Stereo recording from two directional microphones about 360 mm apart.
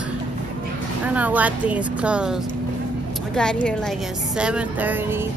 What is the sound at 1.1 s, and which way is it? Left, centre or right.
A woman's voice, centre.